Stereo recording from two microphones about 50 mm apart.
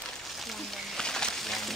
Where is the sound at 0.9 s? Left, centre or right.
Centre.